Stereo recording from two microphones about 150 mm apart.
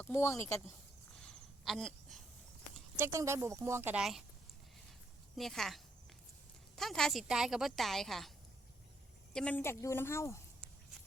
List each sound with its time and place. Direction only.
0.0 s a woman's voice: 15° left (ahead or behind)
1.2 s a sound: centre (ahead or behind)
2.9 s speech: 15° right (ahead or behind)
5.4 s a woman's voice: centre (ahead or behind)
9.3 s a woman's voice: 5° left (ahead or behind)